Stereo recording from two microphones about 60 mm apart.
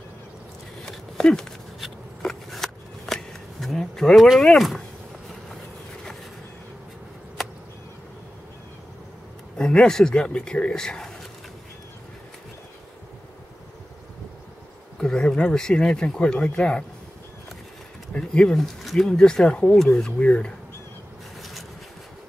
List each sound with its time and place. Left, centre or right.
0.8 s a sound: centre
2.2 s shuffling cards: centre
4.5 s speech: centre
9.6 s speech: centre
15.0 s speech: centre
18.1 s speech: centre
18.6 s speech: centre
20.2 s speech: left